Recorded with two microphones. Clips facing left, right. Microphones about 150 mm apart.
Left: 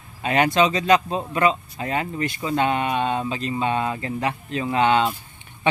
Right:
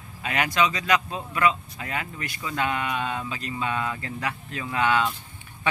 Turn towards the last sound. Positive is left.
turn(degrees=25)  # may be behind; listen again after turning